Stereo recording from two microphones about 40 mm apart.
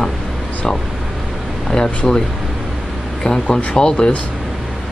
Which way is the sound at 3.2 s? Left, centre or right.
Centre.